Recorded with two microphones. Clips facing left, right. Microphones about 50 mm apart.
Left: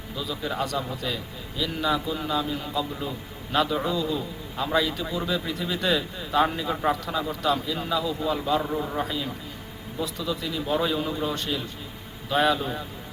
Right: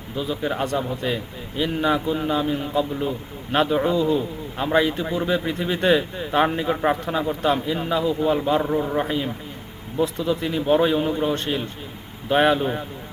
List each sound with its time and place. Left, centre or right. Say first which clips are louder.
0.2 s a man's voice: right 5 dB; right
8.7 s a man's voice: right 6 dB; right